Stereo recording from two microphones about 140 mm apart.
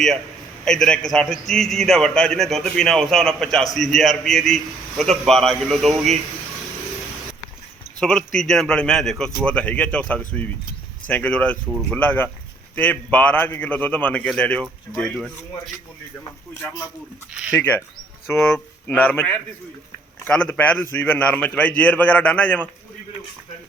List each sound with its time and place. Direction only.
0.6 s a man's voice: 5° left (ahead or behind)
8.0 s a man's voice: 5° left (ahead or behind)
16.6 s a man's voice: 15° left (ahead or behind)